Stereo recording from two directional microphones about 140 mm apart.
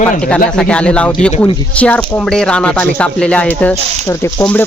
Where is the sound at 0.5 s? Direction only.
5° left (ahead or behind).